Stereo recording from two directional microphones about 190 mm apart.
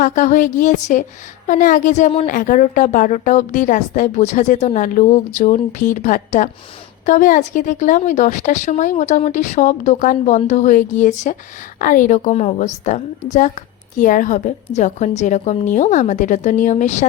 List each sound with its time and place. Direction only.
0.0 s a woman's voice: 40° left (ahead or behind)